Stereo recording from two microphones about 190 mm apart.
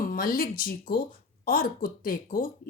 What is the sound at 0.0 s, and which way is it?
A woman's voice, 50° left (ahead or behind).